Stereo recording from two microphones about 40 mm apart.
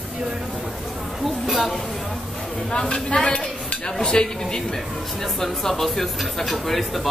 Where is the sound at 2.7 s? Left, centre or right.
Left.